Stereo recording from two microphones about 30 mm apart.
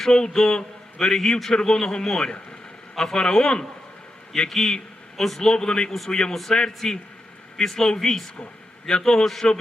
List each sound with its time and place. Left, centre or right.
0.1 s a man's voice: centre
5.4 s a man's voice: left
9.2 s a man's voice: centre